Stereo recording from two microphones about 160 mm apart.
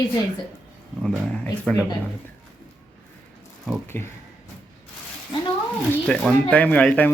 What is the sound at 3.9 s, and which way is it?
Speech, 15° left (ahead or behind).